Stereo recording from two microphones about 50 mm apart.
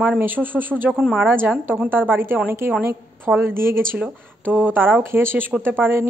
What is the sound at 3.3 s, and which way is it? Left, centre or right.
Speech, right.